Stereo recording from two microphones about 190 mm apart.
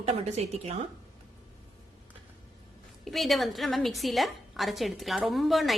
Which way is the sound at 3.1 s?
Centre (ahead or behind).